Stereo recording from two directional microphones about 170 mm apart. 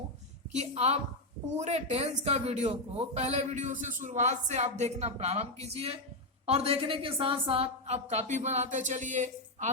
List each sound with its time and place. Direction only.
0.5 s speech: 40° right (ahead or behind)